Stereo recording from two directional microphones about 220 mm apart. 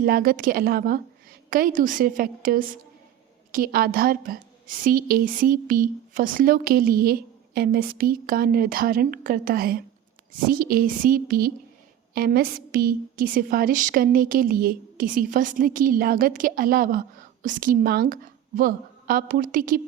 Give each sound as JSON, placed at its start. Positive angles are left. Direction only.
{"t": 0.0, "sound": "a woman's voice", "side_deg": -40}